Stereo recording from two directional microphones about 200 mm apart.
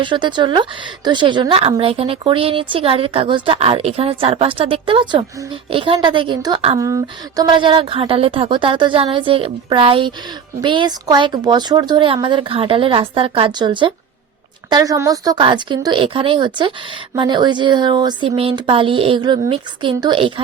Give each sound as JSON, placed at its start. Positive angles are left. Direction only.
{"t": 0.0, "sound": "a woman's voice", "side_deg": -25}